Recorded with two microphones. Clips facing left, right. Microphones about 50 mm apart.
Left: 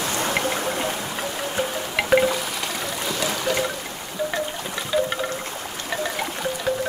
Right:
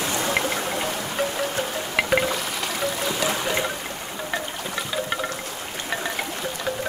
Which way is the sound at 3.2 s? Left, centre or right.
Centre.